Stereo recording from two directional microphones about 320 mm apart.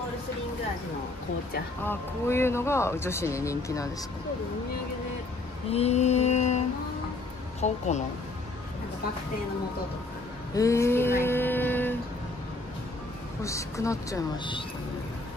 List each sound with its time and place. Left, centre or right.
1.9 s speech: centre
5.7 s mantra: centre
7.6 s mantra: left
10.5 s speech: centre
13.4 s speech: centre